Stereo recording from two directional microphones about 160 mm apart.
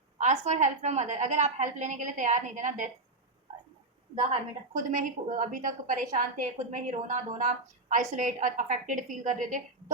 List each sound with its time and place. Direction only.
0.2 s a woman's voice: 50° right (ahead or behind)
4.7 s a woman's voice: 55° right (ahead or behind)